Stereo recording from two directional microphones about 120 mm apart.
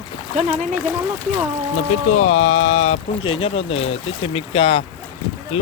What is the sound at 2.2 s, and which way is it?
Speech, 90° left.